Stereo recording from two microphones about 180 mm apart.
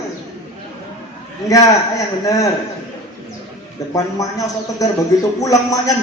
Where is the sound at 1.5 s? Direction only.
20° left (ahead or behind).